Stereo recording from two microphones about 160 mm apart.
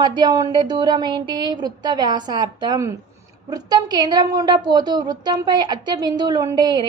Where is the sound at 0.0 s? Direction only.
25° right (ahead or behind).